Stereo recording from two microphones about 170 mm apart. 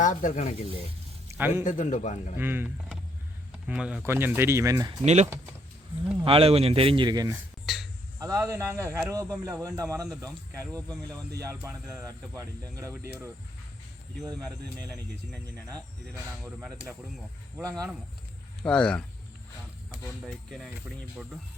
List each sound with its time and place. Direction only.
0.0 s speech: 50° left (ahead or behind)
1.3 s speech: 10° right (ahead or behind)
1.6 s speech: 45° left (ahead or behind)
2.4 s speech: 10° right (ahead or behind)
5.0 s a man's voice: 40° right (ahead or behind); by 7.3 s 25° right (ahead or behind)
7.7 s speech: centre (ahead or behind)
8.2 s speech: 20° right (ahead or behind)
16.4 s speech: 5° right (ahead or behind)
17.6 s speech: 20° right (ahead or behind)
18.6 s speech: 5° left (ahead or behind)
20.2 s speech: centre (ahead or behind)